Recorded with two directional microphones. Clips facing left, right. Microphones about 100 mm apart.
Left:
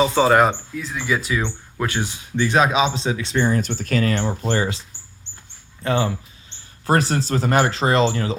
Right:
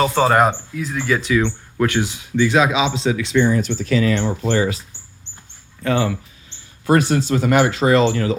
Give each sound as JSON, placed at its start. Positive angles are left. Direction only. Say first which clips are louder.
{"t": 0.0, "sound": "speech", "louder": "even", "side_deg": 5}
{"t": 1.3, "sound": "speech", "louder": "right 6 dB", "side_deg": 15}
{"t": 2.4, "sound": "speech", "louder": "right 1 dB", "side_deg": 40}
{"t": 3.6, "sound": "speech", "louder": "right 3 dB", "side_deg": 45}
{"t": 4.4, "sound": "speech", "louder": "right 4 dB", "side_deg": 35}
{"t": 5.8, "sound": "speech", "louder": "right 2 dB", "side_deg": 30}